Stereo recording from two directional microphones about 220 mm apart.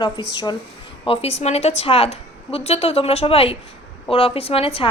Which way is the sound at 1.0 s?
25° left (ahead or behind).